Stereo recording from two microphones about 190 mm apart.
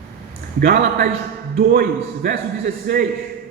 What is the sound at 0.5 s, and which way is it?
A man's voice, 55° right (ahead or behind).